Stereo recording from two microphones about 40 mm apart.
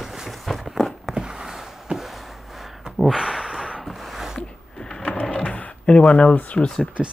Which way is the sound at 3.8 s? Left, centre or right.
Centre.